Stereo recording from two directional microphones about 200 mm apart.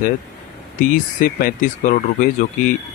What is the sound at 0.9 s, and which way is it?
Speech, 40° left (ahead or behind).